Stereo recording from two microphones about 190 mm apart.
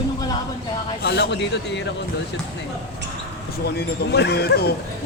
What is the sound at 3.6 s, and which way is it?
Speech, 60° left (ahead or behind).